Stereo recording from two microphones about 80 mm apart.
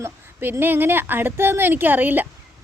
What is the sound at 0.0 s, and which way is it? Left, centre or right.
A woman's voice, right.